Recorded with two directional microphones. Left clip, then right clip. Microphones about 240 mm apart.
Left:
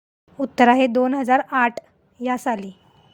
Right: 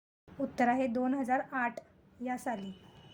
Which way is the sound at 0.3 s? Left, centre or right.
Left.